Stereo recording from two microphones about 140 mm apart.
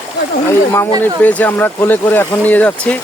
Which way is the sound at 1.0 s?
10° left (ahead or behind).